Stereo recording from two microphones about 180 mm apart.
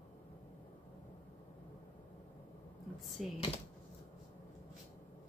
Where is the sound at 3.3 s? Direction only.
30° left (ahead or behind).